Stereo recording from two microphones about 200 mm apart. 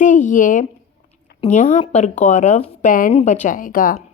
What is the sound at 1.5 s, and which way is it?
A woman's voice, 40° left (ahead or behind).